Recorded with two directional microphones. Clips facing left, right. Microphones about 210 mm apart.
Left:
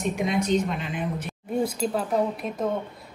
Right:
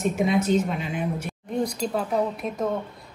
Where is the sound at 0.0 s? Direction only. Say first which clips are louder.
Right 3 dB; centre (ahead or behind).